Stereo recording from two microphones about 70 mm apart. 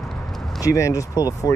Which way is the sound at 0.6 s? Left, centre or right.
Left.